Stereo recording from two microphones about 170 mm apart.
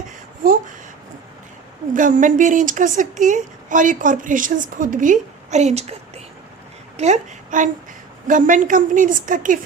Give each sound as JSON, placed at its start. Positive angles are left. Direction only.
{"t": 1.9, "sound": "a woman's voice", "side_deg": -50}